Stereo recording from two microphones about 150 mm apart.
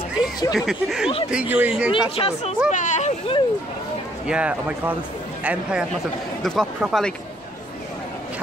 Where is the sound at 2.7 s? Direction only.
55° left (ahead or behind).